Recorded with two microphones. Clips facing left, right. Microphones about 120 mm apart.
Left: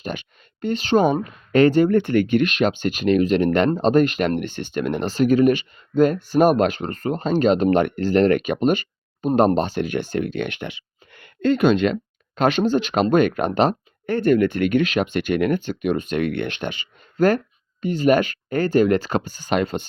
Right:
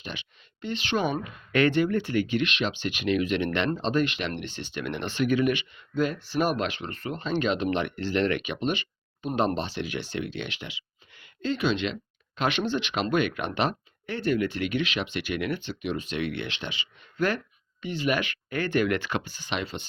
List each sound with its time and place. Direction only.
0.0 s speech: 45° left (ahead or behind)